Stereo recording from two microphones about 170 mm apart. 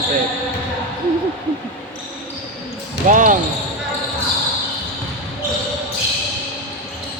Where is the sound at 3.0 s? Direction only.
50° right (ahead or behind).